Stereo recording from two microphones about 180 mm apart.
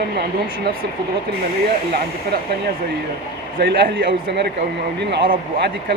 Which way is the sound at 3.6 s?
55° right (ahead or behind).